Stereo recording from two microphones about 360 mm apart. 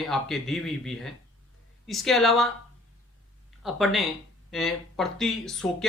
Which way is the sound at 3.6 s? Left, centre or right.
Centre.